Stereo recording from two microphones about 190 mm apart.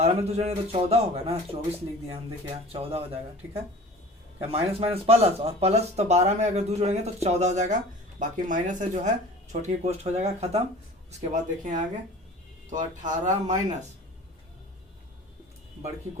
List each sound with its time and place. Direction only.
0.0 s speech: 35° right (ahead or behind)
2.7 s speech: 30° right (ahead or behind)